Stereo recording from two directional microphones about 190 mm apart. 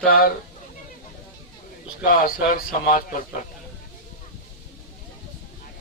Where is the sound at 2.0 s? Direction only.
50° left (ahead or behind).